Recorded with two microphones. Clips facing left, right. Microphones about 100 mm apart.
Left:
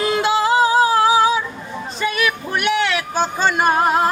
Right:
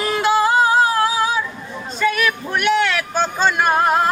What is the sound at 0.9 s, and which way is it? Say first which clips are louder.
Female singing: left 4 dB; 20° left (ahead or behind).